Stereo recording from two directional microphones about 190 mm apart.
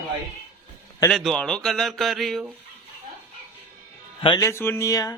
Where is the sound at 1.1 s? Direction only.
Centre (ahead or behind).